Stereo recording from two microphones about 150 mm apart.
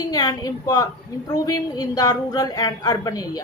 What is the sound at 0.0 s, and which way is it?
A woman's voice, 25° left (ahead or behind).